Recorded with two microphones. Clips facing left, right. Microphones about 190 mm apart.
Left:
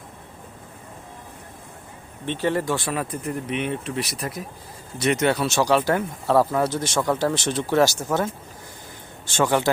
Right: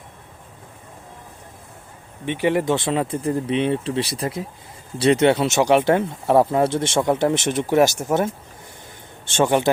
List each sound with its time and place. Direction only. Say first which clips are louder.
2.2 s speech: right 4 dB; 15° right (ahead or behind)
9.3 s speech: right 3 dB; 20° right (ahead or behind)